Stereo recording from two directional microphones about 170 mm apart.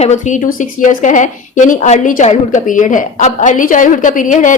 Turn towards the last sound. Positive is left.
turn(degrees=50)  # may be behind; listen again after turning